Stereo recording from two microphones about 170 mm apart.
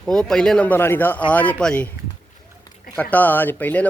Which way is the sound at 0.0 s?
5° left (ahead or behind).